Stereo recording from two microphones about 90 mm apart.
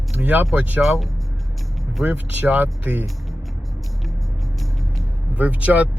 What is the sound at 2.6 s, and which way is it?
Speech, 20° right (ahead or behind).